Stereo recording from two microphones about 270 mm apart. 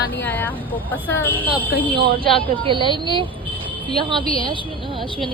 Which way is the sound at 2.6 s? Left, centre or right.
Centre.